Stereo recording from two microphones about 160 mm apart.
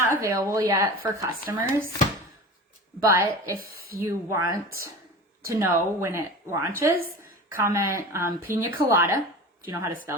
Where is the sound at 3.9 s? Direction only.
20° right (ahead or behind).